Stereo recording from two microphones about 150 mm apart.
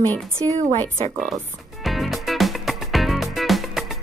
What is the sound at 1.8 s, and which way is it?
Music, centre (ahead or behind).